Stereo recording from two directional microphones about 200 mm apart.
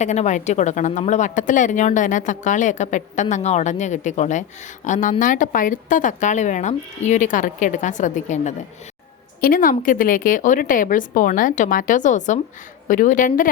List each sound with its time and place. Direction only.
0.0 s a woman's voice: 35° left (ahead or behind)